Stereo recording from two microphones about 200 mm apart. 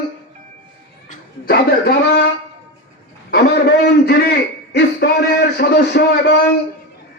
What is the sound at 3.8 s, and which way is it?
A man's voice, 50° left (ahead or behind).